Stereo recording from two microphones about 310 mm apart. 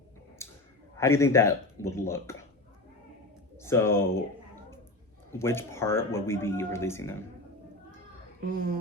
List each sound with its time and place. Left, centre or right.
0.4 s clicking: centre
0.9 s speech: centre
3.6 s speech: centre
5.3 s speech: centre
8.4 s a child's voice: right